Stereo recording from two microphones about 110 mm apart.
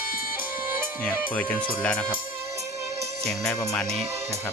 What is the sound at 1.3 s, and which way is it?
Speech, 10° left (ahead or behind).